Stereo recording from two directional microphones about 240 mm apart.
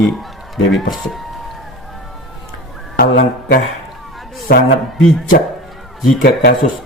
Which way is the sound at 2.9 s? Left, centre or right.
Left.